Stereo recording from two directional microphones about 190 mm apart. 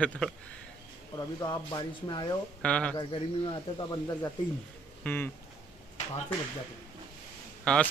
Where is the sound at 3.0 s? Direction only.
25° left (ahead or behind); by 5.3 s 10° left (ahead or behind).